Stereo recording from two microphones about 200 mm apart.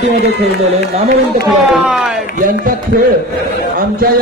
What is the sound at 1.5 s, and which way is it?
Speech, centre (ahead or behind).